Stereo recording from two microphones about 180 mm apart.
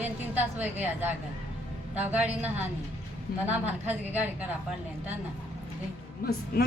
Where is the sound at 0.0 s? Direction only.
10° right (ahead or behind).